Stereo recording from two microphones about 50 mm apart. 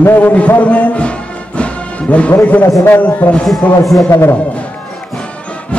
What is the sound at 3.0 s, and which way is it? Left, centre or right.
Speech, left.